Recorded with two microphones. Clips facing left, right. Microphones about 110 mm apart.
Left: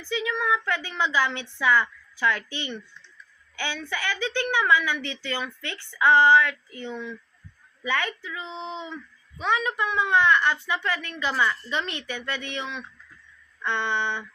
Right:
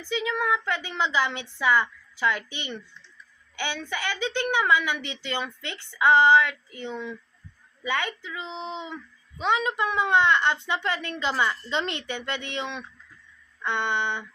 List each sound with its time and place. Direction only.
0.0 s a woman's voice: 20° right (ahead or behind)